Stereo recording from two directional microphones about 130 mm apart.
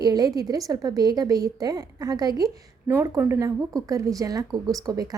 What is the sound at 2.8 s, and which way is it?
A woman's voice, 15° right (ahead or behind).